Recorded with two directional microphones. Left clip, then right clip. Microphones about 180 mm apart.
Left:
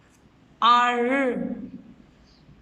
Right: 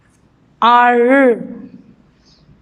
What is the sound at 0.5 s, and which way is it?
Speech, 55° right (ahead or behind).